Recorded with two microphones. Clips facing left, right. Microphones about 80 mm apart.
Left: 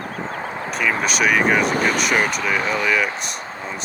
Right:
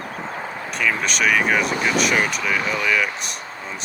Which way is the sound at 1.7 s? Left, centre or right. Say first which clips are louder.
Left 1 dB; left.